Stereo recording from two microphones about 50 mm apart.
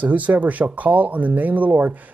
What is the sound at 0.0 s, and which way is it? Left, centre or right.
Speech, right.